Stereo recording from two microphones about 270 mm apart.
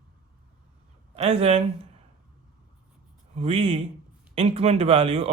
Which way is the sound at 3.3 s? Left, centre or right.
Right.